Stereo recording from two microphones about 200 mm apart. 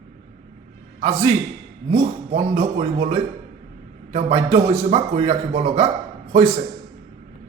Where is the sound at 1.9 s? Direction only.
35° right (ahead or behind).